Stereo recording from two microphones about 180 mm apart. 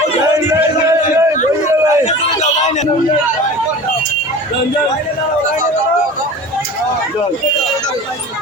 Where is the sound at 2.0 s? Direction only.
40° left (ahead or behind).